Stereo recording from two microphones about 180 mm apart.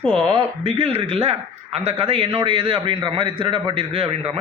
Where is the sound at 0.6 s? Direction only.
35° right (ahead or behind).